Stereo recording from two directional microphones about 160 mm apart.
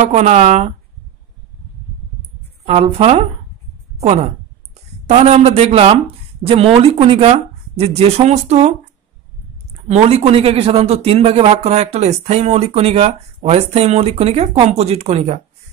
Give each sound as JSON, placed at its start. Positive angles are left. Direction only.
{"t": 0.0, "sound": "speech", "side_deg": -45}
{"t": 2.6, "sound": "speech", "side_deg": -40}
{"t": 9.8, "sound": "speech", "side_deg": -40}